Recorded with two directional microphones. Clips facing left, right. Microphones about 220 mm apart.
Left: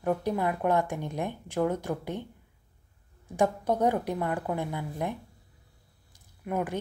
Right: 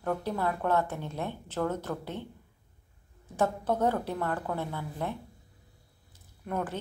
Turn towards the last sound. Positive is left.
turn(degrees=10)  # may be behind; listen again after turning